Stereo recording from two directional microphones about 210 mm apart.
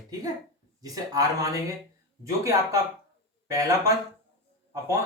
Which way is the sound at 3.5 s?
15° right (ahead or behind).